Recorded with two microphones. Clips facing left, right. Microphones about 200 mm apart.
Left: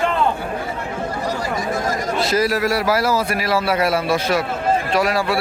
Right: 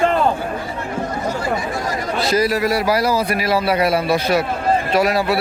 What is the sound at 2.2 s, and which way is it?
A man's voice, centre (ahead or behind).